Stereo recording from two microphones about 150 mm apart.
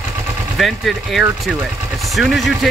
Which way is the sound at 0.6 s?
Centre (ahead or behind).